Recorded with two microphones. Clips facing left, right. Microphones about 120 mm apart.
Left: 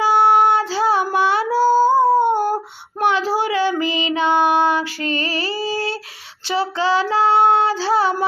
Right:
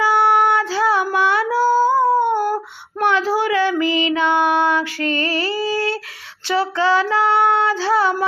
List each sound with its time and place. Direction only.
0.0 s child singing: 30° left (ahead or behind)
6.5 s female singing: 30° left (ahead or behind)